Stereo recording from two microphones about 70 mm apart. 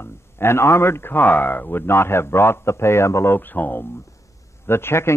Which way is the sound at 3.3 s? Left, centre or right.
Left.